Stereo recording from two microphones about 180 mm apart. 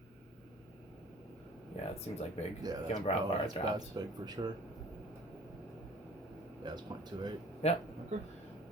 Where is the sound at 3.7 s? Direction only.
20° right (ahead or behind).